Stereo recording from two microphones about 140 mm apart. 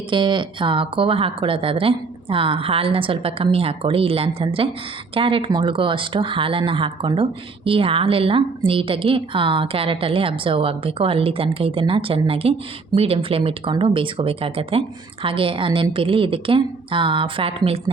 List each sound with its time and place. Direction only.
0.1 s speech: 35° right (ahead or behind)